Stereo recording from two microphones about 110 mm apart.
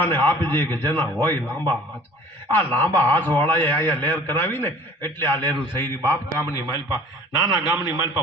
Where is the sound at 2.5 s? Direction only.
20° left (ahead or behind).